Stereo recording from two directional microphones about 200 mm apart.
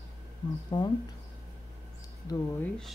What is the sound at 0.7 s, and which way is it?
Speech, 25° left (ahead or behind).